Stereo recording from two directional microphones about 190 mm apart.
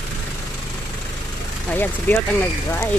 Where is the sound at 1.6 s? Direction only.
10° left (ahead or behind).